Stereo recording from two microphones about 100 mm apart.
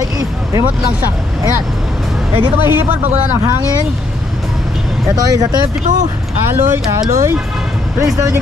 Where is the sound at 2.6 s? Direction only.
20° right (ahead or behind).